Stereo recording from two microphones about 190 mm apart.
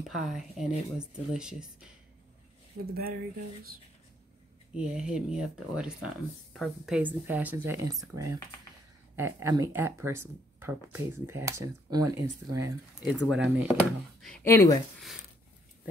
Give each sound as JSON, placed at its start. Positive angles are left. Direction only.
{"t": 0.1, "sound": "speech", "side_deg": 0}
{"t": 2.9, "sound": "speech", "side_deg": -50}
{"t": 4.7, "sound": "speech", "side_deg": -5}
{"t": 13.0, "sound": "speech", "side_deg": -5}
{"t": 14.2, "sound": "speech", "side_deg": 5}